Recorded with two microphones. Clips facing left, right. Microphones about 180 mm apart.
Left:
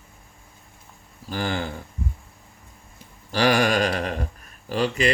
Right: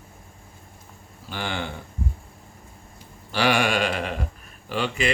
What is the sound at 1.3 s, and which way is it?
Speech, 40° left (ahead or behind).